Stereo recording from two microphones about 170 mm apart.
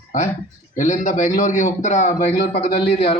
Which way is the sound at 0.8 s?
45° left (ahead or behind).